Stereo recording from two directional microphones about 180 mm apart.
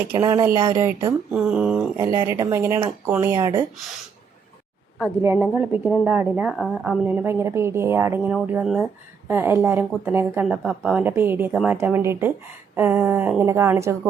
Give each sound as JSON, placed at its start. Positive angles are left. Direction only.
{"t": 0.0, "sound": "a woman's voice", "side_deg": -15}
{"t": 1.3, "sound": "speech", "side_deg": -5}
{"t": 2.0, "sound": "a woman's voice", "side_deg": -20}
{"t": 5.2, "sound": "a woman's voice", "side_deg": -15}